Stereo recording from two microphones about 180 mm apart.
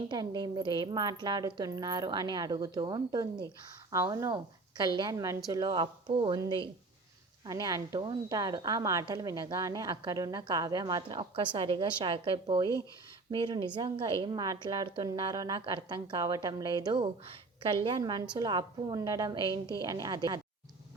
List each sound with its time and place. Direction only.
0.1 s a woman's voice: 25° right (ahead or behind)